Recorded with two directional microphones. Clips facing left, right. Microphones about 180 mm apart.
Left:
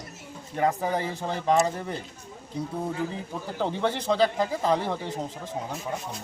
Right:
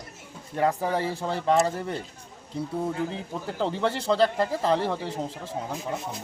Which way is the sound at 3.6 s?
Centre (ahead or behind).